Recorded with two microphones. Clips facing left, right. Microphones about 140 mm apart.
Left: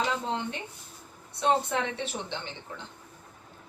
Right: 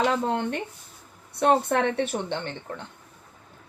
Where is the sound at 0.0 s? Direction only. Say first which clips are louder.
Right 6 dB; 55° right (ahead or behind).